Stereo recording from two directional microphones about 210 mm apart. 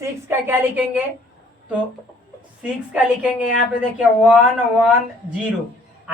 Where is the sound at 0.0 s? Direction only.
10° right (ahead or behind).